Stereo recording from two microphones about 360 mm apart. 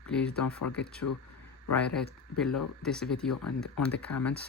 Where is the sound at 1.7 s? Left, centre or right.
Centre.